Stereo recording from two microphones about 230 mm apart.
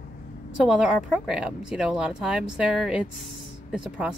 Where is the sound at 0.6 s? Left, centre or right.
Centre.